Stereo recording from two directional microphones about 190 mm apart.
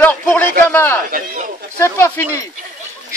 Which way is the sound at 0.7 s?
10° left (ahead or behind).